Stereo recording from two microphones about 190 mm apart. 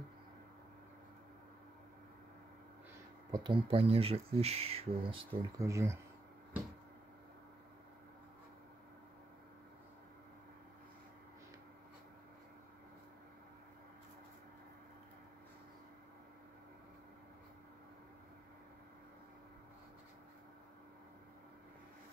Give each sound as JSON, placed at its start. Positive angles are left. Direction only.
{"t": 3.3, "sound": "speech", "side_deg": -20}
{"t": 5.6, "sound": "speech", "side_deg": -15}